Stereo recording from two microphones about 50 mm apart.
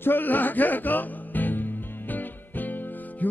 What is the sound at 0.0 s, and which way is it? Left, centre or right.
Music, left.